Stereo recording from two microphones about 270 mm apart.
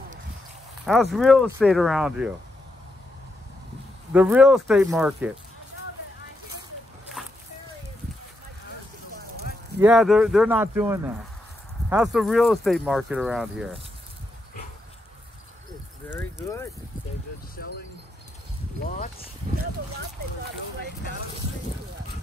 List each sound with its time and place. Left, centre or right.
1.1 s speech: centre
4.1 s speech: centre
9.8 s speech: centre
16.1 s speech: centre
17.6 s speech: left
18.8 s speech: left